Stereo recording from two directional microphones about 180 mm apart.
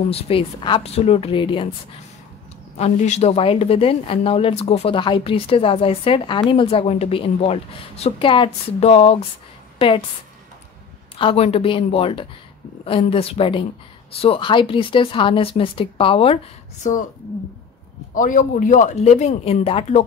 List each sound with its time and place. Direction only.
0.1 s speech: 30° left (ahead or behind)
2.8 s a woman's voice: 40° left (ahead or behind)
11.1 s a woman's voice: 30° left (ahead or behind)
16.8 s a woman's voice: 45° left (ahead or behind)
18.1 s speech: 45° left (ahead or behind)